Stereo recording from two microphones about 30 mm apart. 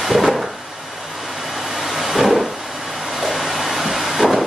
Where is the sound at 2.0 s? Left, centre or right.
Centre.